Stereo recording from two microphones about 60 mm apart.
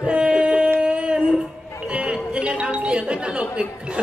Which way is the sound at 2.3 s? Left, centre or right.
Centre.